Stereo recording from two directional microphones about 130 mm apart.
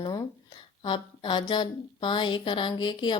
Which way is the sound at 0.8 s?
35° left (ahead or behind).